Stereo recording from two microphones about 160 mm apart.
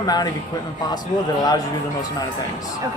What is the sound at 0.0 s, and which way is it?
Speech, 25° left (ahead or behind).